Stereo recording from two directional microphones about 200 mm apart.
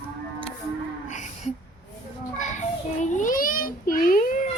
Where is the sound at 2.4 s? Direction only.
35° left (ahead or behind).